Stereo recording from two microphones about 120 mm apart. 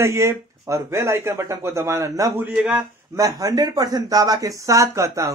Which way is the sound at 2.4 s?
10° right (ahead or behind).